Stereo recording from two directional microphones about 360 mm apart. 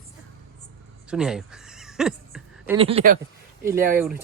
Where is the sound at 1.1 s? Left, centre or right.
Centre.